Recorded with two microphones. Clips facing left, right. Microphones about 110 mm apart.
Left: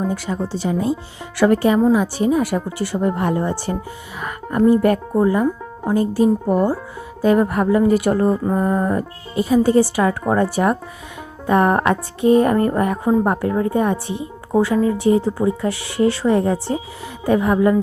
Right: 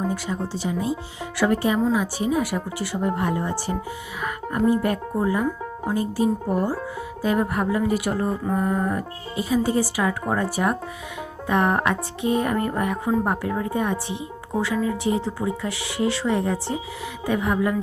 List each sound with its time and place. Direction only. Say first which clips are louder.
0.3 s a woman's voice: left 5 dB; 60° left (ahead or behind)
4.7 s a woman's voice: left 7 dB; 55° left (ahead or behind)
5.9 s speech: left 7 dB; 60° left (ahead or behind)
7.2 s a woman's voice: left 7 dB; 50° left (ahead or behind)
8.4 s a woman's voice: left 5 dB; 40° left (ahead or behind)